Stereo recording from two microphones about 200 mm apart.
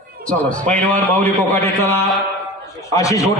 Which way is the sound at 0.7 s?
10° left (ahead or behind).